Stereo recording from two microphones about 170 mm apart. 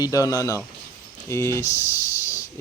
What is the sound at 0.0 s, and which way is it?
A child's voice, 20° left (ahead or behind).